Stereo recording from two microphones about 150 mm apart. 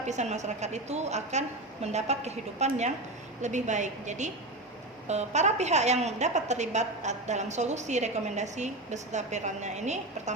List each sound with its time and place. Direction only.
0.0 s a woman's voice: 50° right (ahead or behind)